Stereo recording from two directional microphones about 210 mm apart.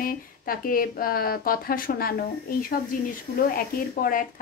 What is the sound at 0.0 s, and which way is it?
Speech, 40° left (ahead or behind).